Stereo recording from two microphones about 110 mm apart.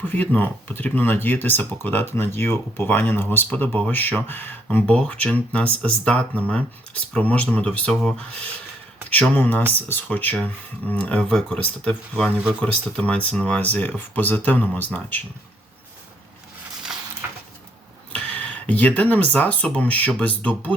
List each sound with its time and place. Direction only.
0.0 s speech: 15° left (ahead or behind)
9.3 s speech: 20° left (ahead or behind)
16.9 s a sound: 5° right (ahead or behind)
18.1 s speech: 10° left (ahead or behind)